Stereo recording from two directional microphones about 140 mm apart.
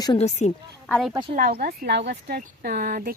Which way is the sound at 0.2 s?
55° left (ahead or behind).